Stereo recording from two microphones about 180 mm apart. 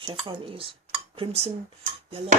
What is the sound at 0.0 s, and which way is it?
Speech, 25° right (ahead or behind).